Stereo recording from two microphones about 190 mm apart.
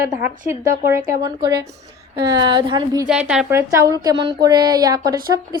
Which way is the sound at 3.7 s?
15° right (ahead or behind).